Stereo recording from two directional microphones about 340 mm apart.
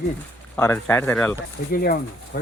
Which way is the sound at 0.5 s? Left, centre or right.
Centre.